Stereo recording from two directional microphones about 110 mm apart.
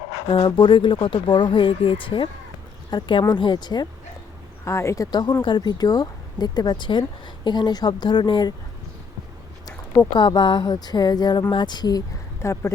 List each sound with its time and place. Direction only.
0.3 s speech: 60° left (ahead or behind)
0.5 s speech: 45° left (ahead or behind)
4.6 s speech: 25° left (ahead or behind); by 8.5 s 45° left (ahead or behind)
9.6 s speech: 35° left (ahead or behind)